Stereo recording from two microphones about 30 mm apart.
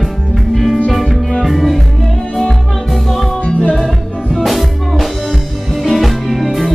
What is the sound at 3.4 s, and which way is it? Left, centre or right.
Music, left.